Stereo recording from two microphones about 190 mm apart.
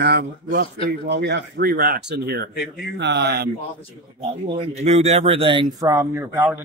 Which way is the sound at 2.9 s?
65° right (ahead or behind).